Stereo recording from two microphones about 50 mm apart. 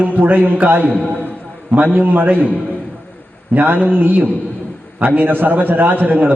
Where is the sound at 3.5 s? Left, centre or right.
Right.